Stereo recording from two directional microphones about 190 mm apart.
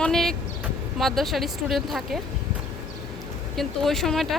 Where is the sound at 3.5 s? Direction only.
Centre (ahead or behind).